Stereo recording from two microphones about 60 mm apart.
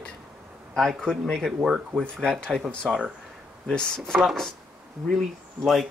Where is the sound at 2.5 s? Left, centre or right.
Centre.